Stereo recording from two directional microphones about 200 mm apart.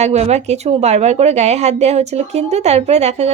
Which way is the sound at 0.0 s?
35° right (ahead or behind).